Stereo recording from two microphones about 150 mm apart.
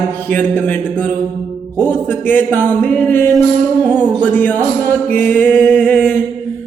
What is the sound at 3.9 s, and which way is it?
Music, 5° right (ahead or behind).